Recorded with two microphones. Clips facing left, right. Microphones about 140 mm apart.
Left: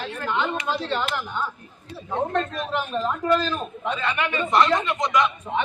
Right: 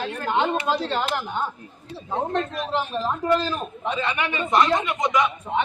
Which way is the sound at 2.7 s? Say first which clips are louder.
Even; 25° right (ahead or behind).